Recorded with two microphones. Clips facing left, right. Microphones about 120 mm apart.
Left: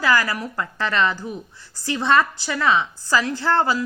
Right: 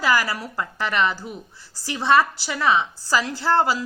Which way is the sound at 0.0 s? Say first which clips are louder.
Left 1 dB; 20° right (ahead or behind).